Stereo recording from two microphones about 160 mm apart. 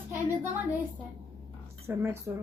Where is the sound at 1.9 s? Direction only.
15° right (ahead or behind).